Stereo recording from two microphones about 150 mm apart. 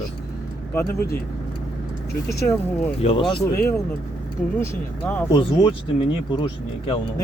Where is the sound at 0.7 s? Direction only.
15° left (ahead or behind).